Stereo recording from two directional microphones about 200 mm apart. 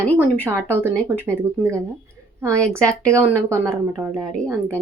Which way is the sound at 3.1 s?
15° right (ahead or behind).